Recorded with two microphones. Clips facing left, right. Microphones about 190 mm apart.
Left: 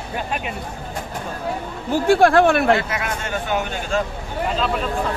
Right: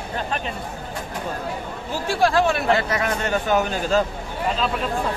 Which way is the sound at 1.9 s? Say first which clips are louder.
Left 6 dB; 55° left (ahead or behind).